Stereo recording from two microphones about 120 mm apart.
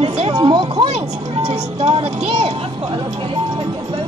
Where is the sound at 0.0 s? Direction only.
55° right (ahead or behind).